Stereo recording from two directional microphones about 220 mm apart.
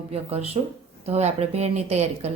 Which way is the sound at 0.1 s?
30° right (ahead or behind).